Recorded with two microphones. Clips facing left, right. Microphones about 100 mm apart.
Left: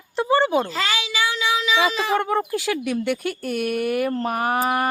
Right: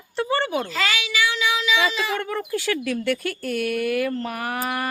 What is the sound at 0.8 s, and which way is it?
Speech, 30° left (ahead or behind).